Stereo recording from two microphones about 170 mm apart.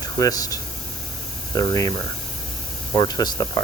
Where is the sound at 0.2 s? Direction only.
20° left (ahead or behind).